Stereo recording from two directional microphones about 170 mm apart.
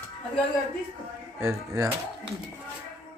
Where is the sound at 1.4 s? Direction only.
20° right (ahead or behind).